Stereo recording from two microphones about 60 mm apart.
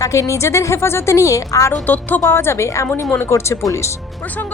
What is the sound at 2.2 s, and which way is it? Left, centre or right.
A woman's voice, left.